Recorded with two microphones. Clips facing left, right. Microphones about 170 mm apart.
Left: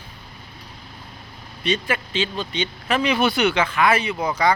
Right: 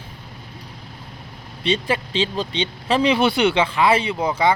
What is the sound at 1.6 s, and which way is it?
Speech, 30° right (ahead or behind).